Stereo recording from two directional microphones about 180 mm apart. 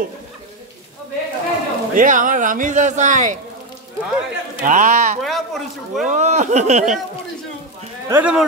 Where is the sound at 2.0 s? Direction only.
45° right (ahead or behind).